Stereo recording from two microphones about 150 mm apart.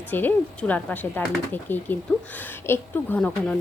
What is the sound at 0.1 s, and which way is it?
Speech, 10° left (ahead or behind).